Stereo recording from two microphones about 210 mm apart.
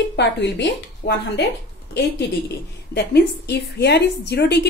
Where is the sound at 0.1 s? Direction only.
55° left (ahead or behind).